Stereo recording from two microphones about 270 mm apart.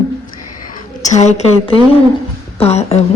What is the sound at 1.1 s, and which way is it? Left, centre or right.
Speech, left.